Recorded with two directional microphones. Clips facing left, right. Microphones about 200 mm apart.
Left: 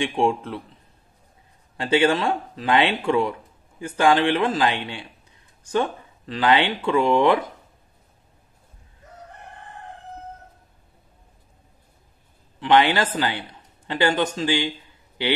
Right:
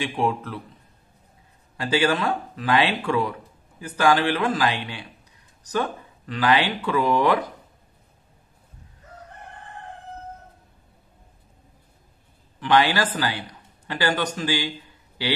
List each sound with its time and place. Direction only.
0.0 s speech: 25° left (ahead or behind)
1.8 s speech: 25° left (ahead or behind)
12.5 s a man's voice: 25° left (ahead or behind)